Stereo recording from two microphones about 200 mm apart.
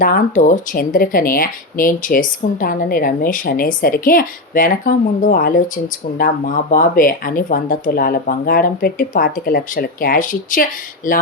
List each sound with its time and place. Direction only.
0.0 s speech: 45° left (ahead or behind)